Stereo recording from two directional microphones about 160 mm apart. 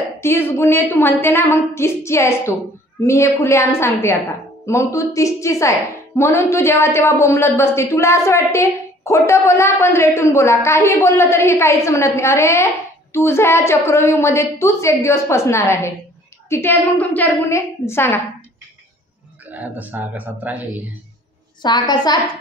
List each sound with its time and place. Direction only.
0.2 s a woman's voice: 15° left (ahead or behind)
19.4 s speech: 10° right (ahead or behind)
21.6 s a woman's voice: 25° left (ahead or behind)